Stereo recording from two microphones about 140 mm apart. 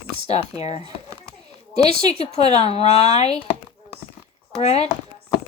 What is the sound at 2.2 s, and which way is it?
A woman's voice, 45° left (ahead or behind).